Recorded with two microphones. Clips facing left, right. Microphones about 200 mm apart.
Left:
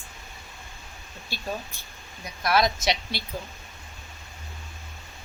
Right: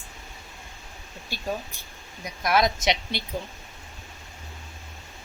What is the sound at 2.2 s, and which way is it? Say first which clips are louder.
A woman's voice: even; 15° right (ahead or behind).